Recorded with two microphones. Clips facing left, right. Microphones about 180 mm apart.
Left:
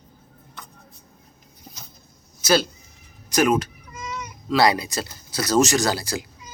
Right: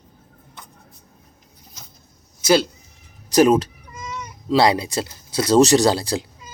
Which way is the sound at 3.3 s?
35° right (ahead or behind).